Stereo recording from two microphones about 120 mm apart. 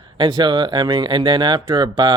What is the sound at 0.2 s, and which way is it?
Speech, 40° right (ahead or behind).